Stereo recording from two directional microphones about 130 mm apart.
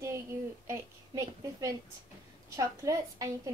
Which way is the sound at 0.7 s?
25° right (ahead or behind).